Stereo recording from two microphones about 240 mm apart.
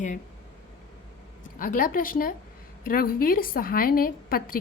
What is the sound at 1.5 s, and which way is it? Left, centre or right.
A woman's voice, left.